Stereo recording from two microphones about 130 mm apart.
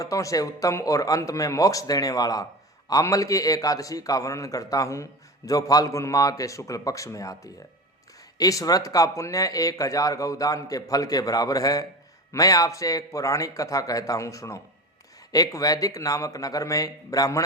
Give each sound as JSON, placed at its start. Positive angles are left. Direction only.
{"t": 0.0, "sound": "speech", "side_deg": 25}